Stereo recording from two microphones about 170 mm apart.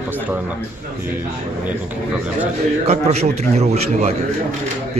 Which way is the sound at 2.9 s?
40° right (ahead or behind).